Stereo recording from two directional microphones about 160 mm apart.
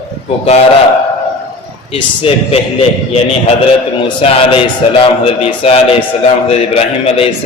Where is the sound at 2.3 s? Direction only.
35° left (ahead or behind).